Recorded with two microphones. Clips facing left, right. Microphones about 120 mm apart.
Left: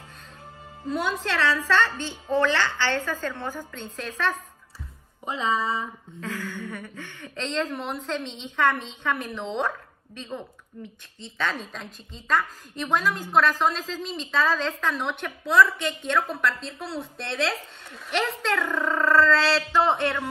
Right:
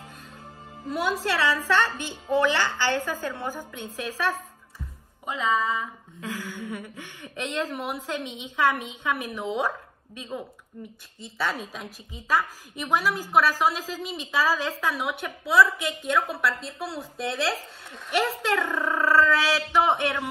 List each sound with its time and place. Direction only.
0.8 s a woman's voice: 5° right (ahead or behind)
4.7 s music: 35° left (ahead or behind)
6.2 s a woman's voice: 15° right (ahead or behind)